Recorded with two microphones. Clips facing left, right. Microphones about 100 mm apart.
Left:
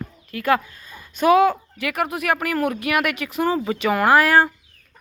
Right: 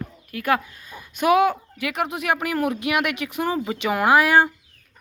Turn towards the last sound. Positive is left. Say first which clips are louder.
# left 1 dB
turn(degrees=-15)  # may be behind; listen again after turning